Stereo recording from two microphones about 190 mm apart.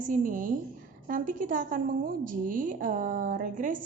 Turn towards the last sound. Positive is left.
turn(degrees=-45)  # may be behind; listen again after turning